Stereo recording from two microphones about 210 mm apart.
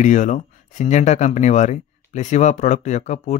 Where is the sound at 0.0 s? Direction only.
35° left (ahead or behind).